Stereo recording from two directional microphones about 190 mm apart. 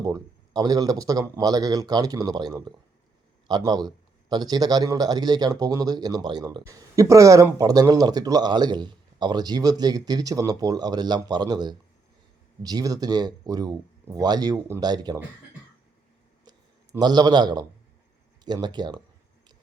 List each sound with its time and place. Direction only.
0.0 s a man's voice: 20° right (ahead or behind)
16.5 s a sound: 20° right (ahead or behind)
18.4 s speech: 20° right (ahead or behind)